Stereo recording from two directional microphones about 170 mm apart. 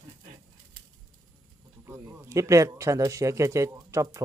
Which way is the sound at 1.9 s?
15° right (ahead or behind).